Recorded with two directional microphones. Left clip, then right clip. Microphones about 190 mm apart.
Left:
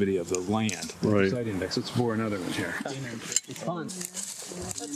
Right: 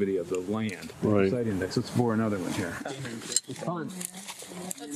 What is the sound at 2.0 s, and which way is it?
Speech, 40° right (ahead or behind).